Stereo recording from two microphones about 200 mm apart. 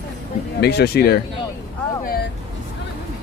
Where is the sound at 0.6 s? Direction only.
55° left (ahead or behind).